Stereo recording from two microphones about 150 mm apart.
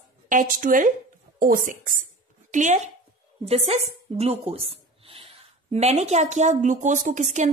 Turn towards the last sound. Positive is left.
turn(degrees=-55)  # may be behind; listen again after turning